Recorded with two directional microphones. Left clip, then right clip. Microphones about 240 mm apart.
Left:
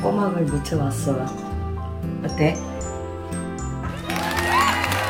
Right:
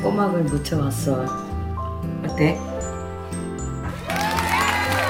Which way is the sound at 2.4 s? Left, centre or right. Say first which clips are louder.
Right 1 dB; centre.